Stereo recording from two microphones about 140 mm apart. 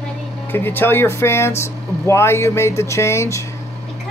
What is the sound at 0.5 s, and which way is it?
Speech, 15° left (ahead or behind).